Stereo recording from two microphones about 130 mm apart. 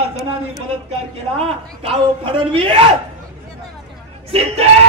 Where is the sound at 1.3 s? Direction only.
45° right (ahead or behind).